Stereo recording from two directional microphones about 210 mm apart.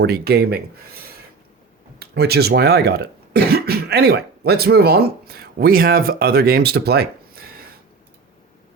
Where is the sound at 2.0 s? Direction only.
50° right (ahead or behind).